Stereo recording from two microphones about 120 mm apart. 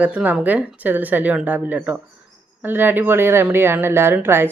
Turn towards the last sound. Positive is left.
turn(degrees=-20)  # may be behind; listen again after turning